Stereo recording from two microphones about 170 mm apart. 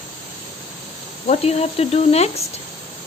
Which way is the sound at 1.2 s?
40° left (ahead or behind).